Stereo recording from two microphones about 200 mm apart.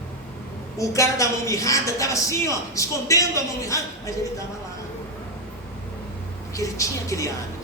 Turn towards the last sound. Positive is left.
turn(degrees=15)  # may be behind; listen again after turning